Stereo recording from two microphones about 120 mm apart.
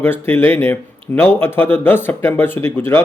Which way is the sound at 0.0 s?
15° left (ahead or behind).